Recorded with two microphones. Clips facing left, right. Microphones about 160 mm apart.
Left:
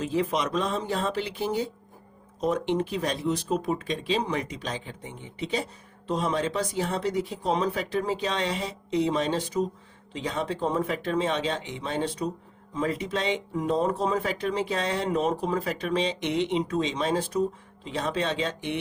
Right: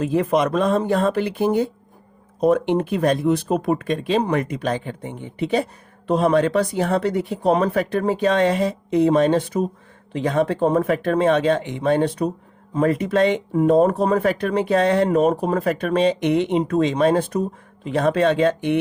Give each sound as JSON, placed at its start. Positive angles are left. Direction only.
{"t": 0.0, "sound": "speech", "side_deg": -55}